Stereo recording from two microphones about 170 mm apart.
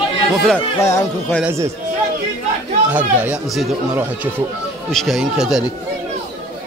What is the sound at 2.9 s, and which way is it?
Speech, 10° right (ahead or behind).